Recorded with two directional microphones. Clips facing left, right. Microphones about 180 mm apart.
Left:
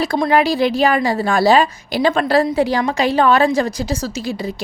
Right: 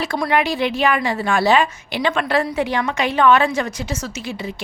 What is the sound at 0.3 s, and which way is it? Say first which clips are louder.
A woman's voice: left 4 dB; 35° left (ahead or behind).